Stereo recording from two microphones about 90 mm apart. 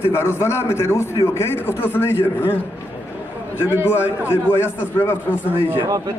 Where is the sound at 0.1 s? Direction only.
25° left (ahead or behind).